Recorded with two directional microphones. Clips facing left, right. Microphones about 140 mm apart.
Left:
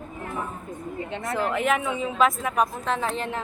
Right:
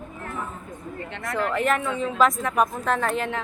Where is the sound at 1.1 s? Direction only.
25° left (ahead or behind).